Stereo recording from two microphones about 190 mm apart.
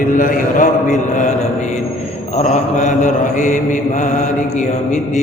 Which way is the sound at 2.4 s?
40° left (ahead or behind).